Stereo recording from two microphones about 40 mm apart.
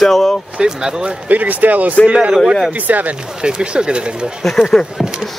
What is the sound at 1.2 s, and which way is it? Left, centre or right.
Speech, right.